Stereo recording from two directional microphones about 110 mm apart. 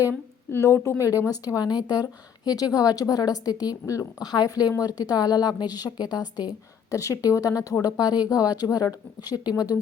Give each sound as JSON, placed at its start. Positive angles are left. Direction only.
{"t": 0.1, "sound": "a woman's voice", "side_deg": 25}